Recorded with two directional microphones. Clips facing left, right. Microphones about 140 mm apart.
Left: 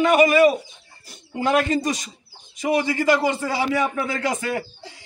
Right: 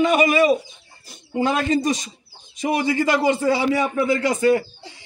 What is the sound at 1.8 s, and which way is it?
A man's voice, 25° right (ahead or behind).